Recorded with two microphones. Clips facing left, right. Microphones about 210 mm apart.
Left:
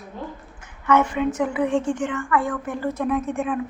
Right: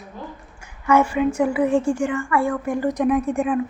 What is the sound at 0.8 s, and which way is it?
A woman's voice, 10° right (ahead or behind).